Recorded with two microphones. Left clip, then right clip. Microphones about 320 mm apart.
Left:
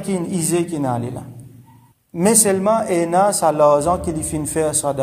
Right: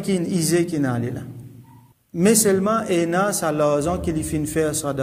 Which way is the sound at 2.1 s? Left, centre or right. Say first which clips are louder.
Left 1 dB; centre.